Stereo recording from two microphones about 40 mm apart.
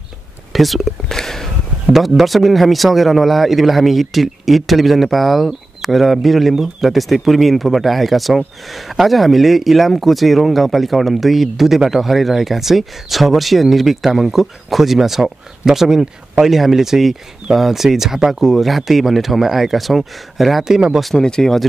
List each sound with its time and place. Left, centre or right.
0.5 s speech: centre
1.0 s a sound: centre
1.9 s speech: centre
21.2 s speech: centre